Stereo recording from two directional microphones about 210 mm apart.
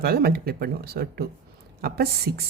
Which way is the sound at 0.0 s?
45° right (ahead or behind).